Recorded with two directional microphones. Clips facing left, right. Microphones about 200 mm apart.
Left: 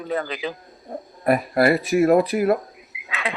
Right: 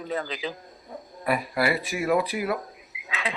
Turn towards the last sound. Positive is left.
turn(degrees=60)  # may be behind; listen again after turning